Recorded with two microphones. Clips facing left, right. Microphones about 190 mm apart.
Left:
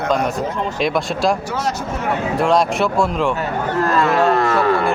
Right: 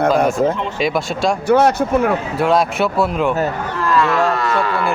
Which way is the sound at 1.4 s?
60° right (ahead or behind).